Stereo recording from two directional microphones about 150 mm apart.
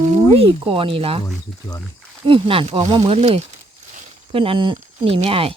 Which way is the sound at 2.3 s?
35° right (ahead or behind).